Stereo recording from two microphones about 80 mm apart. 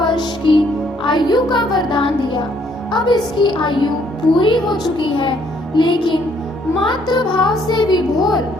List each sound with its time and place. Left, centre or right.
0.0 s music: left
1.0 s a child's voice: left
6.8 s music: left